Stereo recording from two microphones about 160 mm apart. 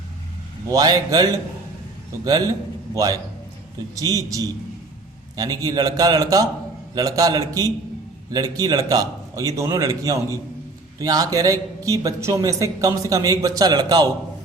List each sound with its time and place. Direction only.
0.7 s a man's voice: 25° right (ahead or behind)